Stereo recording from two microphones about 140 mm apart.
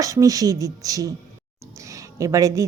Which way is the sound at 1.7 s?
20° right (ahead or behind).